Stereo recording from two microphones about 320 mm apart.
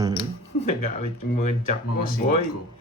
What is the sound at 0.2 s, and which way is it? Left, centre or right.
Speech, left.